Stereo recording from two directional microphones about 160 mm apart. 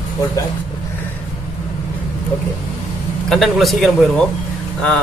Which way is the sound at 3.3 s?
Centre (ahead or behind).